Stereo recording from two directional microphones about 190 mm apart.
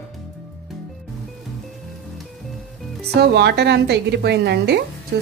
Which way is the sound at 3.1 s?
60° right (ahead or behind).